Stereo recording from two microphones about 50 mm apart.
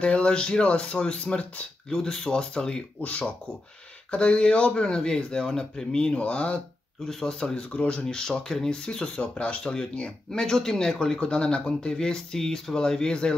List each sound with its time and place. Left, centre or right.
0.0 s speech: left
3.0 s speech: left
7.1 s speech: centre